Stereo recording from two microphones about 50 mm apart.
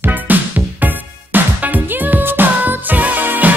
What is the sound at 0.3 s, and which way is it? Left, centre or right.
Music, right.